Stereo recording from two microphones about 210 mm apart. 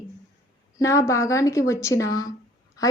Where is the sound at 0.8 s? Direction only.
15° left (ahead or behind).